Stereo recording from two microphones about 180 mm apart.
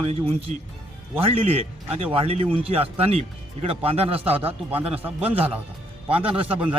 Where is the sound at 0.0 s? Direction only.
30° right (ahead or behind).